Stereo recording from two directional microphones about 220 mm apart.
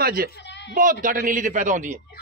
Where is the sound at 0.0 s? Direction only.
40° right (ahead or behind).